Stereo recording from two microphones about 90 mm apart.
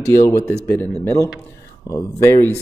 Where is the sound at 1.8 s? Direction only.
30° left (ahead or behind).